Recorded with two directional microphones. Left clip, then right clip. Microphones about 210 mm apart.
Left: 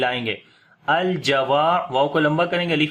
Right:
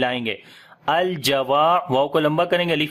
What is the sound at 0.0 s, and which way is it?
Speech, 45° right (ahead or behind).